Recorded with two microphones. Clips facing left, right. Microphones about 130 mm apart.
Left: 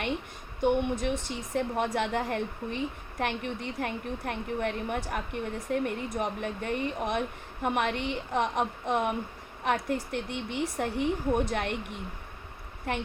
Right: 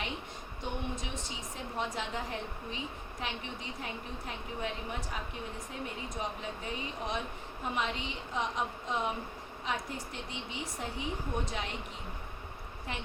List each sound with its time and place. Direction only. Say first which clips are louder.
0.6 s a woman's voice: left 12 dB; 60° left (ahead or behind)
12.9 s a woman's voice: left 9 dB; 60° left (ahead or behind)